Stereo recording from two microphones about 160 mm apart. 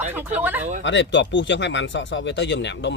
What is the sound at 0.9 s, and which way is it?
Speech, 90° left.